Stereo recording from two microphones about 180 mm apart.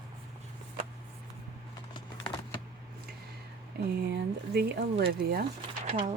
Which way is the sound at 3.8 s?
65° right (ahead or behind).